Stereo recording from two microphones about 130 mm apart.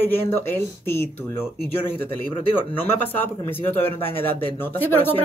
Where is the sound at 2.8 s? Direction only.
15° left (ahead or behind).